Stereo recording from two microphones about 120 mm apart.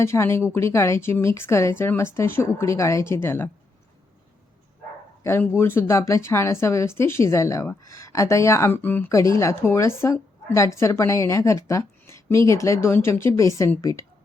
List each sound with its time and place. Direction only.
0.0 s speech: 20° left (ahead or behind)
5.2 s speech: 20° left (ahead or behind)